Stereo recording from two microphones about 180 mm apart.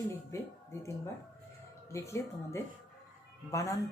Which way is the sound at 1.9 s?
15° left (ahead or behind).